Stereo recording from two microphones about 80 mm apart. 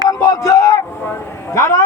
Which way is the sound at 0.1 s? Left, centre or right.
Left.